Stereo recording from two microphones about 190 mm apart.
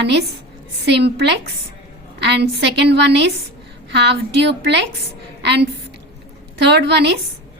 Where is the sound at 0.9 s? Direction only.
65° right (ahead or behind).